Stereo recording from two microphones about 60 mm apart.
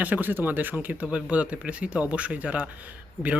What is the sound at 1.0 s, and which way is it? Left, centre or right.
Speech, centre.